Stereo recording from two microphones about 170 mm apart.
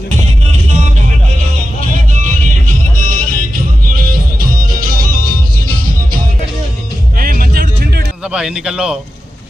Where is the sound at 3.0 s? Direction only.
55° right (ahead or behind).